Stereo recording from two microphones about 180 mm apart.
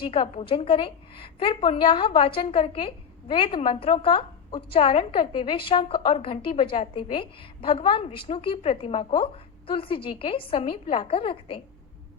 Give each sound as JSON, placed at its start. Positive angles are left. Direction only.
{"t": 0.1, "sound": "a woman's voice", "side_deg": 30}